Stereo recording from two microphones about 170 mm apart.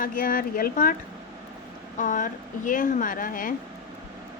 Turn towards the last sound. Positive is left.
turn(degrees=55)  # may be behind; listen again after turning